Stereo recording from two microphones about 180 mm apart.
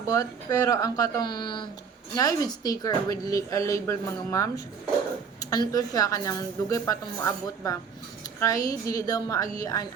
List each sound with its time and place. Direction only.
0.1 s a woman's voice: 20° left (ahead or behind)